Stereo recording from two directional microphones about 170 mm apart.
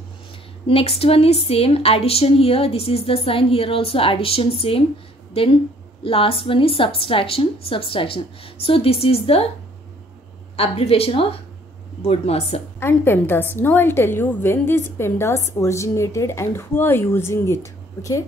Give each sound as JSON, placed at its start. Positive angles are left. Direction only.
{"t": 0.7, "sound": "speech", "side_deg": 35}
{"t": 6.0, "sound": "speech", "side_deg": 35}
{"t": 10.5, "sound": "speech", "side_deg": 40}
{"t": 12.8, "sound": "a woman's voice", "side_deg": 15}